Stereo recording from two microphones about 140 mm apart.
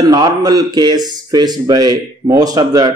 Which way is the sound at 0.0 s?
30° right (ahead or behind).